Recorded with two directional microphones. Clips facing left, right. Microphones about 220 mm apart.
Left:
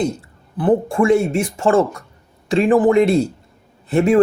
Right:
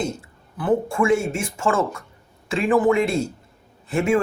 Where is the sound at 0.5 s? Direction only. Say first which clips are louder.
Left 5 dB; 30° left (ahead or behind).